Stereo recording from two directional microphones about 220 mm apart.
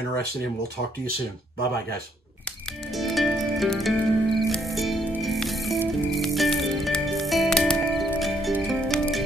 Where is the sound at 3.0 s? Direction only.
Centre (ahead or behind).